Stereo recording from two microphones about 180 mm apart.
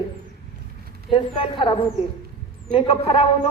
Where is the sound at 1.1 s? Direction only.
30° left (ahead or behind).